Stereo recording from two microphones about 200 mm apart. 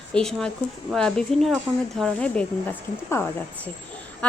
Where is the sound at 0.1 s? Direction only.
5° left (ahead or behind).